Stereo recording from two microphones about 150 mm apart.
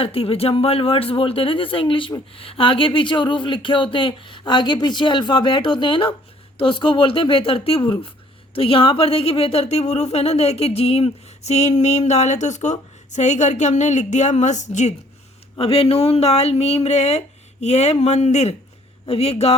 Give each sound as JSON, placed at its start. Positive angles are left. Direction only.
{"t": 0.0, "sound": "speech", "side_deg": 40}
{"t": 15.5, "sound": "speech", "side_deg": 40}